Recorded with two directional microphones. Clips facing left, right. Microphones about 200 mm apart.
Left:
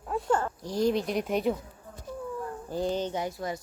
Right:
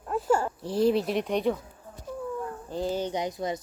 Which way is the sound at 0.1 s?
5° right (ahead or behind).